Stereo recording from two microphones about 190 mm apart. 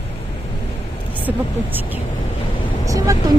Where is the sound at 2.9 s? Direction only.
15° right (ahead or behind).